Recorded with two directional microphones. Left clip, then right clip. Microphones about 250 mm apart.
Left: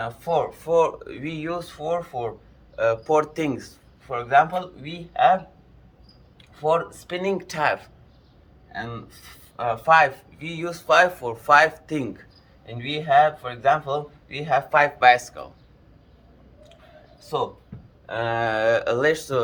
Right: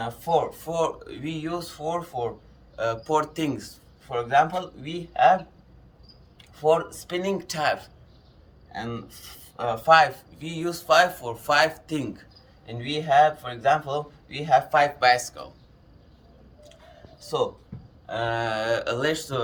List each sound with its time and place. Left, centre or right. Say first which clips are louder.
0.0 s speech: even; centre
6.6 s speech: even; centre
17.2 s speech: even; centre